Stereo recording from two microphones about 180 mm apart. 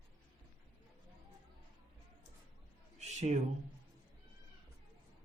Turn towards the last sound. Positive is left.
turn(degrees=-40)  # may be behind; listen again after turning